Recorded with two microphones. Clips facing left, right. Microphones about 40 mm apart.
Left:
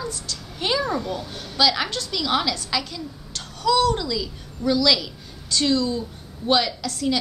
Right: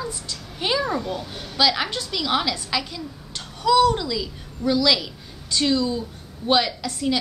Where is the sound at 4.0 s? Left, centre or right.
Centre.